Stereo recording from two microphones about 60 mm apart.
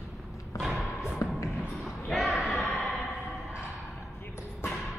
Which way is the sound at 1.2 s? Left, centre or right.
Left.